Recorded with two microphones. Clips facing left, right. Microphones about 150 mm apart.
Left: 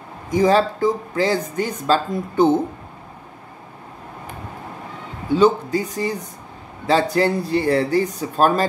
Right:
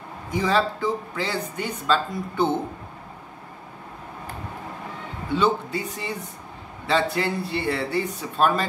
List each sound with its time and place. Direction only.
0.3 s speech: 40° left (ahead or behind)
5.4 s speech: 40° left (ahead or behind)